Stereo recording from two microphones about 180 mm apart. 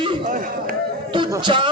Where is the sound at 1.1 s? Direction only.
25° right (ahead or behind).